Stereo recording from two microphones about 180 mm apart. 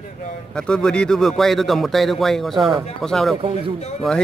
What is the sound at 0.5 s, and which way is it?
Speech, 5° left (ahead or behind).